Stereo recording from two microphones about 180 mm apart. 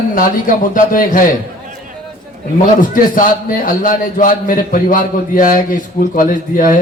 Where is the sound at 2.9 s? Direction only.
50° left (ahead or behind).